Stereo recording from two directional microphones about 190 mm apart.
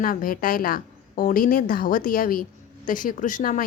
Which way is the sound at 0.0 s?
50° left (ahead or behind).